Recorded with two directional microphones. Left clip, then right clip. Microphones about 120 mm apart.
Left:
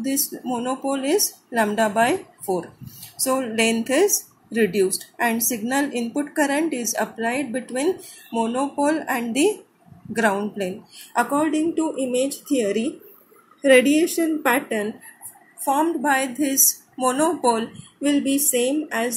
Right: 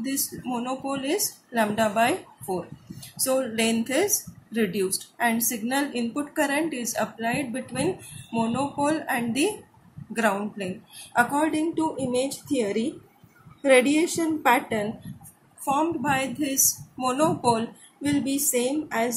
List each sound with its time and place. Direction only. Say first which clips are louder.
0.0 s a woman's voice: left 5 dB; 25° left (ahead or behind)
15.6 s a woman's voice: left 4 dB; 35° left (ahead or behind)